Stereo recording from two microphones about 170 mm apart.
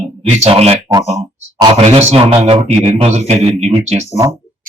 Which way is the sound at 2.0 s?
40° right (ahead or behind).